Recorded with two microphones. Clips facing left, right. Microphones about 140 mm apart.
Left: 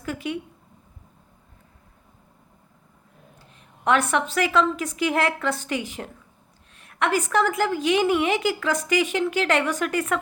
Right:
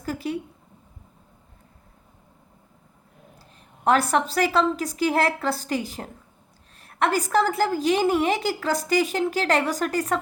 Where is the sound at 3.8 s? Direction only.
35° right (ahead or behind).